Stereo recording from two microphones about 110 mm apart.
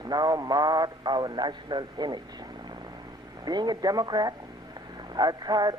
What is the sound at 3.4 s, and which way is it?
Speech, 40° right (ahead or behind).